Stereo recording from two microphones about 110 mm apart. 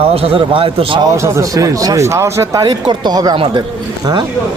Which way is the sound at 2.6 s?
40° right (ahead or behind).